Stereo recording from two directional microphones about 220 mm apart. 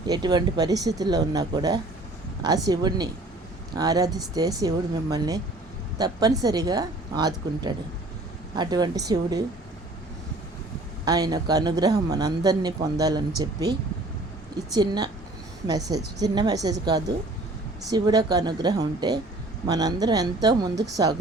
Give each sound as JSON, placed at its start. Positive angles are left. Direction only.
{"t": 0.1, "sound": "a woman's voice", "side_deg": -20}
{"t": 11.0, "sound": "a woman's voice", "side_deg": -15}